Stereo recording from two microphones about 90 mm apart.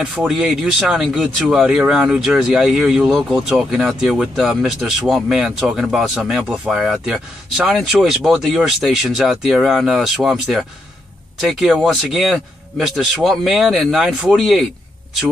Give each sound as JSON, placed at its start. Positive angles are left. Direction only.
{"t": 0.3, "sound": "speech", "side_deg": -5}